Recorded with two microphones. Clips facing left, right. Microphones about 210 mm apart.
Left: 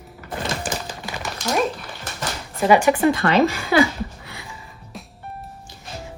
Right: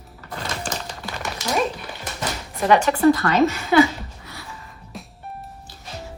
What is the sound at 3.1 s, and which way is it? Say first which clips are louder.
Speech: left 1 dB; 30° left (ahead or behind).